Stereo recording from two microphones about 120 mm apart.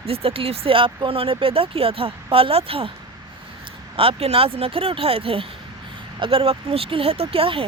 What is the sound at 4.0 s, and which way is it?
Speech, 55° right (ahead or behind).